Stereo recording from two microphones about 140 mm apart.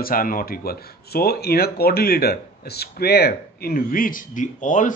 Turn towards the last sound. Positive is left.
turn(degrees=65)  # may be behind; listen again after turning